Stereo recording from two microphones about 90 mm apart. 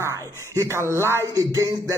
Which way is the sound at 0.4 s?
30° left (ahead or behind).